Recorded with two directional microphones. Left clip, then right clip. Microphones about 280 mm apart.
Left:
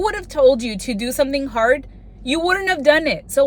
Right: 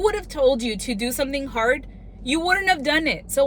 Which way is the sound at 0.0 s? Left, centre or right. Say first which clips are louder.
Left 5 dB; centre.